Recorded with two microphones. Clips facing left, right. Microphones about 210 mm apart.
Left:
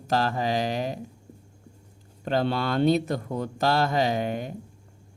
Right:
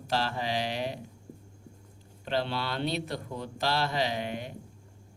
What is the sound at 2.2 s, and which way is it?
Speech, 45° left (ahead or behind).